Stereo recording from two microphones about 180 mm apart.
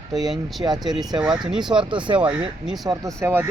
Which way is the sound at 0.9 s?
25° right (ahead or behind).